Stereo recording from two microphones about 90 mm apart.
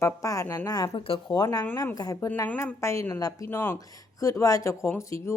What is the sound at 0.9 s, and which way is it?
Speech, 90° left.